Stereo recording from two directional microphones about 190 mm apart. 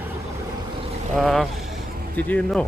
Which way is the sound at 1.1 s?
Centre (ahead or behind).